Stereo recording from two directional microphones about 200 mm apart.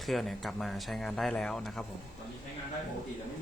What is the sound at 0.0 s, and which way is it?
Speech, centre (ahead or behind).